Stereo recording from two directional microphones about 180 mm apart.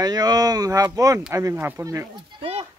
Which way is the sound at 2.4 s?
30° right (ahead or behind).